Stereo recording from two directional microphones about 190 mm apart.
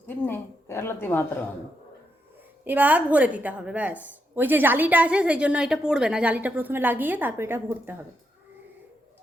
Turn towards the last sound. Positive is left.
turn(degrees=-10)  # may be behind; listen again after turning